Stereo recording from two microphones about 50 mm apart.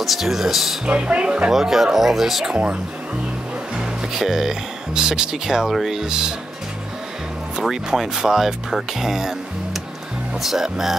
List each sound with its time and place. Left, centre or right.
0.0 s speech: centre
0.8 s speech: right
1.5 s speech: centre
2.5 s speech: right
3.7 s speech: centre
7.6 s speech: centre
10.4 s speech: centre